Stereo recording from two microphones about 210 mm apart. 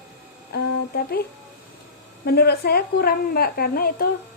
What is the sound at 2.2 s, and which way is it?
Speech, 50° left (ahead or behind).